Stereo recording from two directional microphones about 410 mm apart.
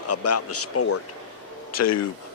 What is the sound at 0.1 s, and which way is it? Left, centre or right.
A man's voice, left.